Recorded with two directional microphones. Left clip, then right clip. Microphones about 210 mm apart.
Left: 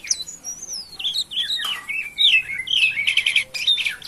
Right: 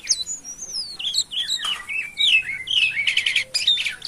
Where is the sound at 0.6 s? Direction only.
15° right (ahead or behind).